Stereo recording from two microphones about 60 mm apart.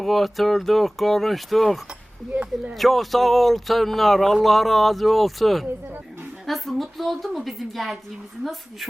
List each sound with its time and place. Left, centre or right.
0.0 s speech: centre
2.3 s speech: centre
2.7 s speech: centre